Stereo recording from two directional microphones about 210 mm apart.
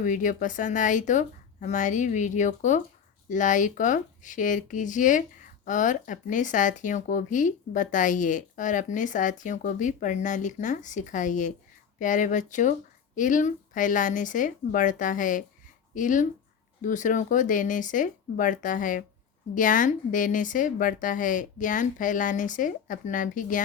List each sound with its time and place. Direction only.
0.0 s speech: 40° left (ahead or behind)